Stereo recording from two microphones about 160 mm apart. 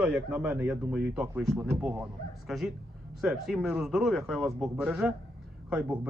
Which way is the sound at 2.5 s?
Centre (ahead or behind).